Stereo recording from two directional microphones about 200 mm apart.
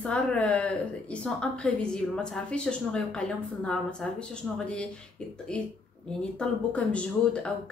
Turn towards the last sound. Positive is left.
turn(degrees=5)  # may be behind; listen again after turning